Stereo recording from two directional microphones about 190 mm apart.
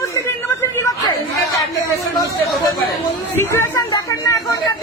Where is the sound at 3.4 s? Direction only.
15° left (ahead or behind).